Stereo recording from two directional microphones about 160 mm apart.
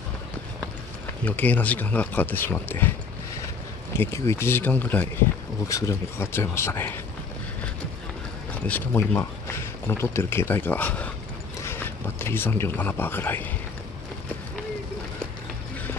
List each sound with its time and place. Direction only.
1.2 s speech: 10° left (ahead or behind)
4.0 s speech: 15° left (ahead or behind)
8.6 s speech: 10° left (ahead or behind)